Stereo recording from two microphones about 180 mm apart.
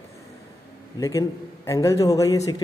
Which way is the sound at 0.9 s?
15° left (ahead or behind).